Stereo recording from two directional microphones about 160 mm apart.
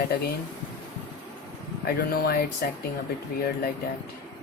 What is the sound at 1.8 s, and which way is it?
Speech, 75° left (ahead or behind).